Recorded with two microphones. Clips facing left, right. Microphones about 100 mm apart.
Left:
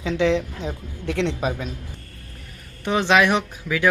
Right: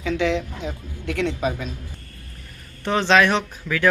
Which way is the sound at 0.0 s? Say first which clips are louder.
Left 2 dB; 25° left (ahead or behind).